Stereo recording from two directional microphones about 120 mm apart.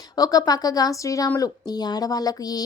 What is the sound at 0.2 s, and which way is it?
A woman's voice, 30° left (ahead or behind).